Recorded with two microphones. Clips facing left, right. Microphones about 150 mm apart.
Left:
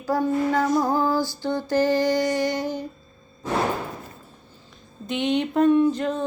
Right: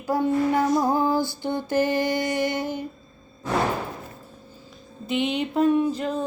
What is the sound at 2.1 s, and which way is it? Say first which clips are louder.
Music: left 2 dB; 15° right (ahead or behind).